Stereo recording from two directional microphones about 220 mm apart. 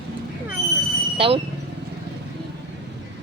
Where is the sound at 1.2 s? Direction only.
25° right (ahead or behind).